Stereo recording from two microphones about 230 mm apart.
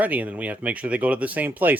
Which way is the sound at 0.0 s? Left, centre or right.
Centre.